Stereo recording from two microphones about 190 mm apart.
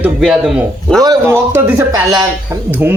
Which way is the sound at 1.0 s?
15° right (ahead or behind).